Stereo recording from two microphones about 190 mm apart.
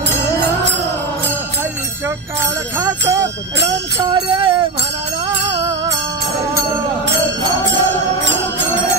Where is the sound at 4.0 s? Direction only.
25° right (ahead or behind).